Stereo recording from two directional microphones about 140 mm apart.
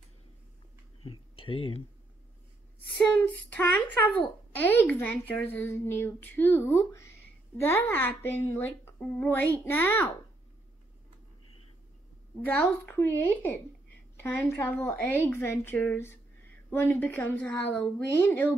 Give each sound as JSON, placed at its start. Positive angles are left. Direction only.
{"t": 1.0, "sound": "speech", "side_deg": 40}
{"t": 3.0, "sound": "speech", "side_deg": 10}
{"t": 12.4, "sound": "speech", "side_deg": 15}